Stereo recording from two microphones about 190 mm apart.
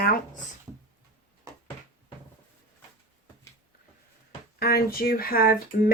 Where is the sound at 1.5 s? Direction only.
15° right (ahead or behind).